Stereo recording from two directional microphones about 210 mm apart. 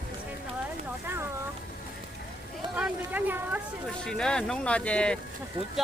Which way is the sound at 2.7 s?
5° right (ahead or behind).